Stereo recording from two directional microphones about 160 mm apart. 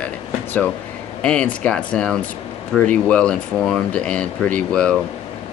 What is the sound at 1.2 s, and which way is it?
Speech, 5° left (ahead or behind).